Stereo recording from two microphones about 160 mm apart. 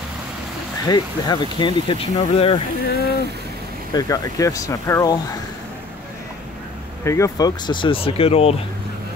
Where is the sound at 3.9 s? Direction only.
25° left (ahead or behind).